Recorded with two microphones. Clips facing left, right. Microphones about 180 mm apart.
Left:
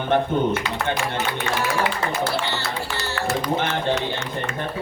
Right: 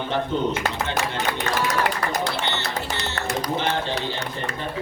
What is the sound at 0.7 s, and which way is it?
Speech, 45° right (ahead or behind).